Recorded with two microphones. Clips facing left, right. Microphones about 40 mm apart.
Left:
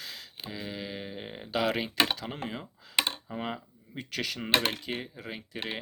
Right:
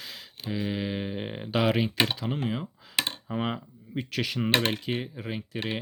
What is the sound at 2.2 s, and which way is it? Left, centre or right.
Speech, centre.